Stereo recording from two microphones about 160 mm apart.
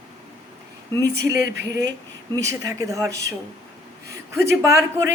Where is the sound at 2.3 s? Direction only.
20° right (ahead or behind).